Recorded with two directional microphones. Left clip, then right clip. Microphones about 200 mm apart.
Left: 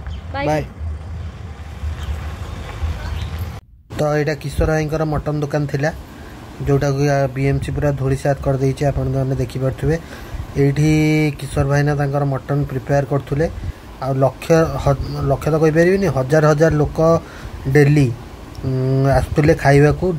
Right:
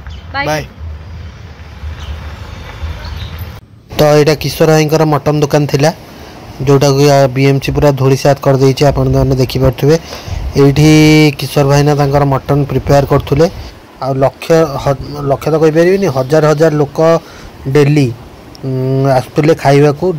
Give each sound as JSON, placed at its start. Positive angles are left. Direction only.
{"t": 0.3, "sound": "speech", "side_deg": 5}
{"t": 3.9, "sound": "a man's voice", "side_deg": -25}